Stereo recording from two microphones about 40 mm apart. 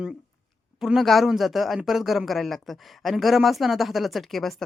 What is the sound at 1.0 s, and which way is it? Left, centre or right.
Speech, centre.